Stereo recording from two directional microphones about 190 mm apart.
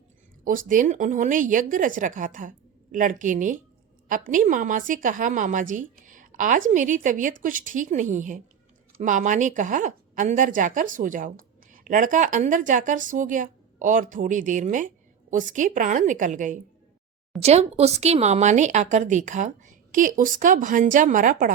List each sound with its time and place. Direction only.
0.4 s speech: 45° right (ahead or behind)